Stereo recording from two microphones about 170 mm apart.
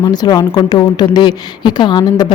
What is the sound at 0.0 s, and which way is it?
Speech, 25° left (ahead or behind).